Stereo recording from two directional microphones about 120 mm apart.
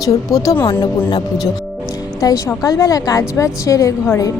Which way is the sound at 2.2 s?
30° left (ahead or behind).